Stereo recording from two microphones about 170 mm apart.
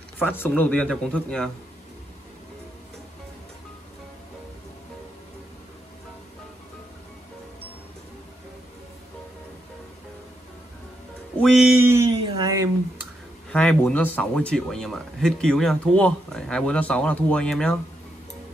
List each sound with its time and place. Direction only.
0.2 s a man's voice: 10° left (ahead or behind)
11.3 s music: 5° left (ahead or behind)
11.8 s a sound: 15° right (ahead or behind)
13.5 s speech: 10° left (ahead or behind)